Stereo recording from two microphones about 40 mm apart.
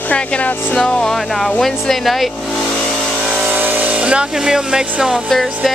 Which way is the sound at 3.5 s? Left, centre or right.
Right.